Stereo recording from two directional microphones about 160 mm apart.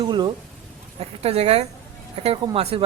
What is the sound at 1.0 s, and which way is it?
A man's voice, 40° right (ahead or behind).